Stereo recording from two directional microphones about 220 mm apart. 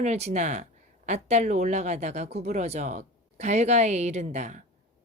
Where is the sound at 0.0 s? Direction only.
30° right (ahead or behind).